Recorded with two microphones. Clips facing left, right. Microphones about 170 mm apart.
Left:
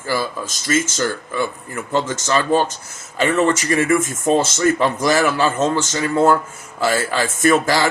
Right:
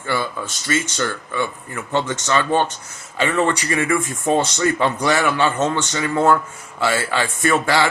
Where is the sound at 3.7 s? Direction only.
40° left (ahead or behind).